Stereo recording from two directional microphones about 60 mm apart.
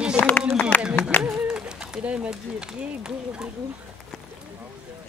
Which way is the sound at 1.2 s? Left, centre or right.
Centre.